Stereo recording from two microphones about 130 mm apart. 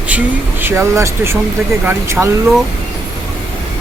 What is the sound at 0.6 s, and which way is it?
A man's voice, 20° right (ahead or behind).